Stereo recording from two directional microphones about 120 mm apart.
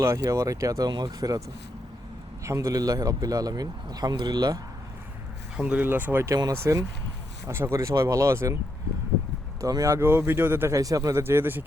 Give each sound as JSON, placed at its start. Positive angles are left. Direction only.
{"t": 0.0, "sound": "speech", "side_deg": -25}
{"t": 2.4, "sound": "speech", "side_deg": -25}
{"t": 5.5, "sound": "speech", "side_deg": -10}
{"t": 6.3, "sound": "speech", "side_deg": -30}
{"t": 9.6, "sound": "speech", "side_deg": -30}